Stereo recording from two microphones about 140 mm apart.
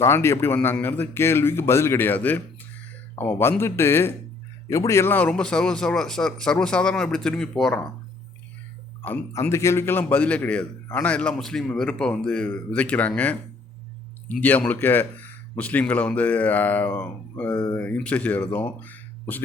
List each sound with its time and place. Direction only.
0.0 s a man's voice: 20° left (ahead or behind)
9.0 s a man's voice: 15° left (ahead or behind)
14.4 s a man's voice: 10° left (ahead or behind)
18.8 s a sound: 15° left (ahead or behind)